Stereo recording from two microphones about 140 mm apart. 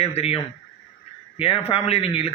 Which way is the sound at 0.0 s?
45° left (ahead or behind).